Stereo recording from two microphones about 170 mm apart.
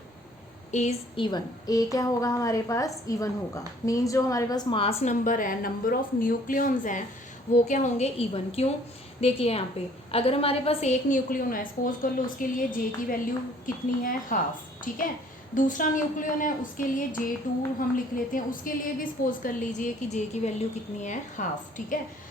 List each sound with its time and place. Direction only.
0.7 s a woman's voice: 45° left (ahead or behind)
1.1 s a woman's voice: 25° left (ahead or behind); by 12.6 s 55° left (ahead or behind)
13.7 s a woman's voice: 50° left (ahead or behind)